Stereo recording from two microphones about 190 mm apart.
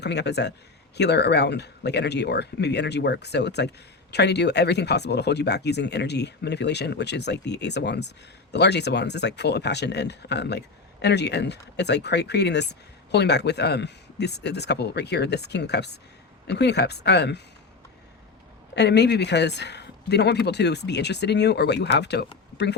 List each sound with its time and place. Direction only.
0.0 s speech: 60° left (ahead or behind)
18.7 s speech: 65° left (ahead or behind)